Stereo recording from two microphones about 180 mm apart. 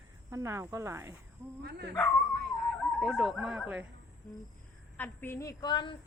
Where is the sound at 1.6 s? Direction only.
65° right (ahead or behind).